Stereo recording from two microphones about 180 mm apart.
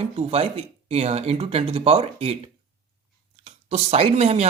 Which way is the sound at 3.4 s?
35° right (ahead or behind).